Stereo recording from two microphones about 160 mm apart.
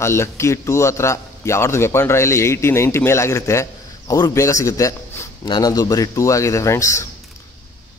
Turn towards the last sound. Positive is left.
turn(degrees=20)  # may be behind; listen again after turning